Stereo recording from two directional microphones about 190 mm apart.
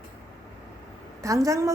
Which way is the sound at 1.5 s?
15° right (ahead or behind).